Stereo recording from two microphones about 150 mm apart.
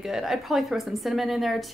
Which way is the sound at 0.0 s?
Centre (ahead or behind).